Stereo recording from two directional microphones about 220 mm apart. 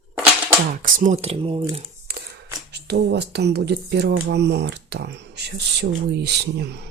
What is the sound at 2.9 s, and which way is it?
Speech, 50° right (ahead or behind).